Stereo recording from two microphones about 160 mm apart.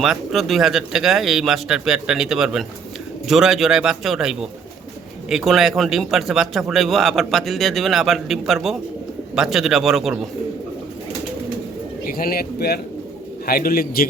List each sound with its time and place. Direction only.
0.0 s a man's voice: centre (ahead or behind)
12.0 s speech: 65° left (ahead or behind); by 12.8 s 80° left
13.4 s speech: 70° left (ahead or behind)